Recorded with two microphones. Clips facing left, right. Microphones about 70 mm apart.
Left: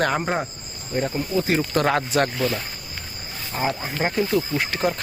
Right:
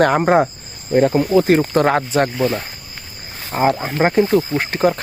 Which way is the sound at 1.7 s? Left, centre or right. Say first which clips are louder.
Right 5 dB; right.